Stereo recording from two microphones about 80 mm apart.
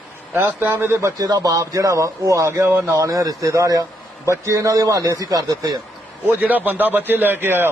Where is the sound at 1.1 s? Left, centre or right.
Right.